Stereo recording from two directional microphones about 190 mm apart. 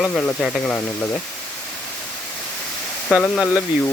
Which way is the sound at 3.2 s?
5° left (ahead or behind).